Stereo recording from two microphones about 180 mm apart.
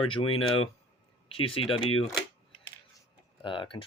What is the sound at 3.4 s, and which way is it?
Speech, 25° left (ahead or behind).